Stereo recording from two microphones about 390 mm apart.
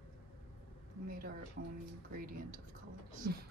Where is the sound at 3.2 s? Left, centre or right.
Right.